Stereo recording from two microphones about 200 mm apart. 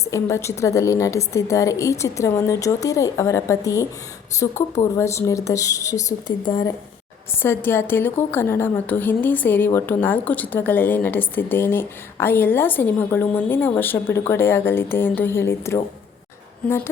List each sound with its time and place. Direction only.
0.0 s a woman's voice: 15° left (ahead or behind)